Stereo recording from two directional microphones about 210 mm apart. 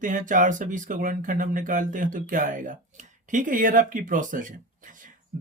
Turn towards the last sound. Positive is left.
turn(degrees=-40)  # may be behind; listen again after turning